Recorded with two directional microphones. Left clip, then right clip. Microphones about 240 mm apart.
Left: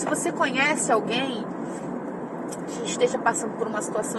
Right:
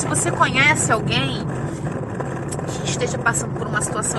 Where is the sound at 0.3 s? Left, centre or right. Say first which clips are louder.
Right 8 dB; centre.